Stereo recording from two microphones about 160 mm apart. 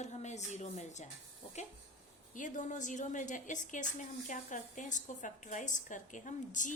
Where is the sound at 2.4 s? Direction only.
50° left (ahead or behind).